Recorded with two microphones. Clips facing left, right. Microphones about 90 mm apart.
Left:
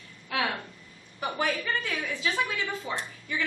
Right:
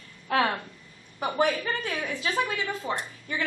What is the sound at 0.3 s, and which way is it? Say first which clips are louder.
A woman's voice: right 5 dB; 40° right (ahead or behind).